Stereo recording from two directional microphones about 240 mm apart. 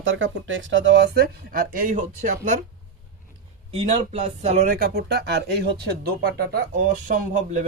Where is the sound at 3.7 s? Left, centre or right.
Right.